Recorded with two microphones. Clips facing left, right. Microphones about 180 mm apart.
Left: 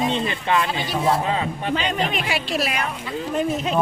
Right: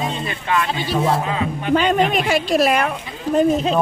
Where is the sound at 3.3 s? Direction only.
30° right (ahead or behind).